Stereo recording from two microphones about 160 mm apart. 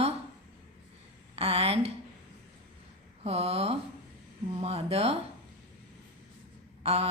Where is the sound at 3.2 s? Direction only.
40° right (ahead or behind).